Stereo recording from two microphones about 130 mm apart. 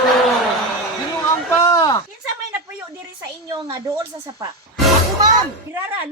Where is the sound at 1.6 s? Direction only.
25° left (ahead or behind).